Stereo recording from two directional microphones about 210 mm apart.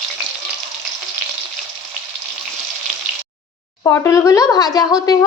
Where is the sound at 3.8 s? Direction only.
15° left (ahead or behind).